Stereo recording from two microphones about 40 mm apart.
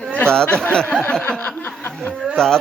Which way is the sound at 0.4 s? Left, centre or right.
Left.